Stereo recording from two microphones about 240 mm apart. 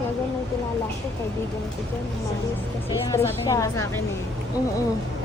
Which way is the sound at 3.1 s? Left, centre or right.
Centre.